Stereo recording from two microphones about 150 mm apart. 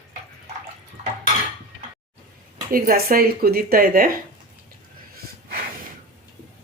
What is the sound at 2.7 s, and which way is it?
Speech, 75° right (ahead or behind).